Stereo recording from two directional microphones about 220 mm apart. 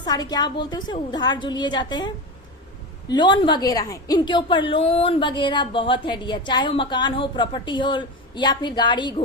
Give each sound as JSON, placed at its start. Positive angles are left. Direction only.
{"t": 0.0, "sound": "a woman's voice", "side_deg": 20}